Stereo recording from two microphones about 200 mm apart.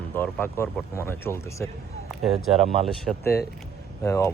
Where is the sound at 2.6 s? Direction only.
30° right (ahead or behind).